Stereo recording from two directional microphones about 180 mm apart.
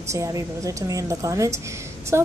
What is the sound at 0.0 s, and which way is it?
A woman's voice, 15° right (ahead or behind).